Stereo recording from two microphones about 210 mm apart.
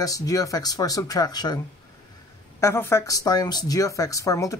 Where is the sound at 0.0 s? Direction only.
15° left (ahead or behind).